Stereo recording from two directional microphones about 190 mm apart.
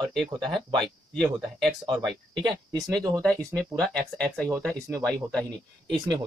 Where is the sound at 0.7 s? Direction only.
Centre (ahead or behind).